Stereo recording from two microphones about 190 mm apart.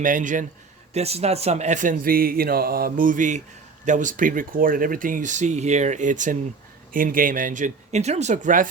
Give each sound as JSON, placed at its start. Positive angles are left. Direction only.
{"t": 0.0, "sound": "speech", "side_deg": -45}